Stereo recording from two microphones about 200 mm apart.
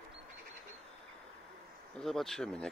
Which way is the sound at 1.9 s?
Centre (ahead or behind).